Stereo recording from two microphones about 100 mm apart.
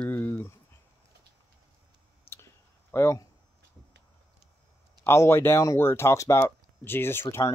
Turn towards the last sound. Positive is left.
turn(degrees=25)  # may be behind; listen again after turning